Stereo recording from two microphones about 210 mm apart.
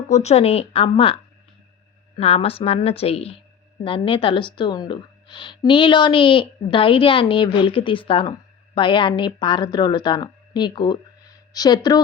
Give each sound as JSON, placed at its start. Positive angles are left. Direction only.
{"t": 0.1, "sound": "a woman's voice", "side_deg": 30}